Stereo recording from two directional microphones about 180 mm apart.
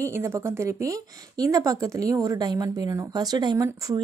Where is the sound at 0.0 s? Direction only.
15° right (ahead or behind).